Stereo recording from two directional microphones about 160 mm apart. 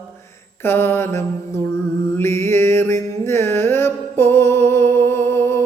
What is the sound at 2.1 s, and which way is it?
Music, 15° left (ahead or behind).